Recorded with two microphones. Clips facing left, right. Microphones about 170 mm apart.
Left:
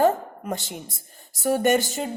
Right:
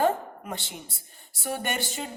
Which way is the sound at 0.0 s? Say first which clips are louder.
Left 4 dB; 45° left (ahead or behind).